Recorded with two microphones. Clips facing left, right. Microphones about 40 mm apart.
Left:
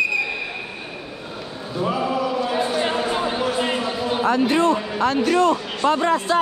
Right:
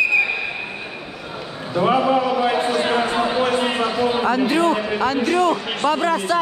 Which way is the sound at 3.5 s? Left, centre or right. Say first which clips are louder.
Right 2 dB; centre.